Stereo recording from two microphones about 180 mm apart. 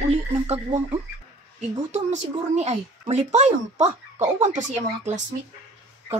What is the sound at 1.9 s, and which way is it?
Speech, 40° right (ahead or behind).